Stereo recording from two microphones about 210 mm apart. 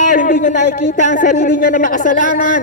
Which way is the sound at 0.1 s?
40° left (ahead or behind).